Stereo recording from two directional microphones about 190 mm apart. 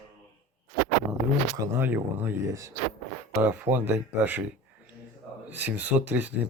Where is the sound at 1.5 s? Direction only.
15° right (ahead or behind).